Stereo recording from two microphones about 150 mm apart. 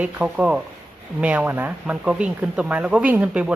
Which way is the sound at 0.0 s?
10° right (ahead or behind).